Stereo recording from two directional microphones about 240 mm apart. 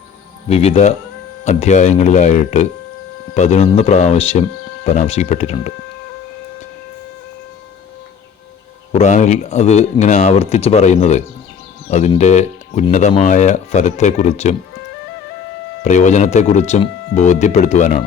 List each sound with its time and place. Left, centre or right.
0.4 s speech: left
8.9 s speech: left
15.8 s speech: left